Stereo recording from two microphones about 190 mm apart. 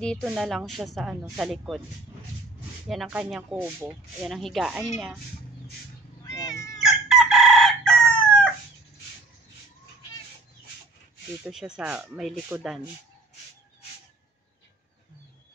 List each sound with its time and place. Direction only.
0.0 s speech: 5° left (ahead or behind)
2.9 s speech: 5° right (ahead or behind)
6.4 s cat: 15° left (ahead or behind)
6.8 s chicken: centre (ahead or behind)
11.4 s speech: 5° right (ahead or behind)